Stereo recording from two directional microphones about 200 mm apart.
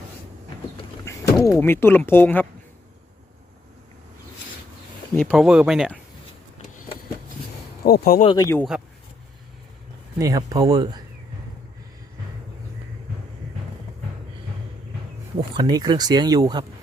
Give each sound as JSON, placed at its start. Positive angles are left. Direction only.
{"t": 1.5, "sound": "speech", "side_deg": 10}
{"t": 5.1, "sound": "speech", "side_deg": 0}
{"t": 7.9, "sound": "speech", "side_deg": 50}
{"t": 8.2, "sound": "speech", "side_deg": 20}
{"t": 10.2, "sound": "speech", "side_deg": -15}
{"t": 15.5, "sound": "speech", "side_deg": -20}